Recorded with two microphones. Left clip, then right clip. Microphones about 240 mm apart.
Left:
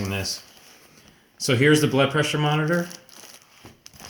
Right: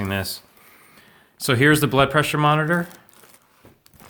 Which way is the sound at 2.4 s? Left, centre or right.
Right.